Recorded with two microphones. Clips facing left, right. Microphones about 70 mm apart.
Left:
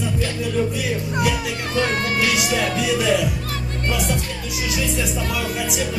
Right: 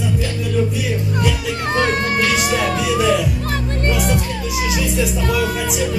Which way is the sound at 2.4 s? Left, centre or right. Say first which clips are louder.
Right 3 dB; right.